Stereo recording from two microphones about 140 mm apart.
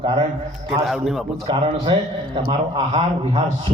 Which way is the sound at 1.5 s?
35° right (ahead or behind).